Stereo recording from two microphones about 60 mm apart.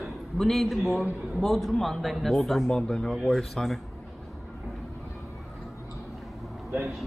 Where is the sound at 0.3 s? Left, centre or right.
Centre.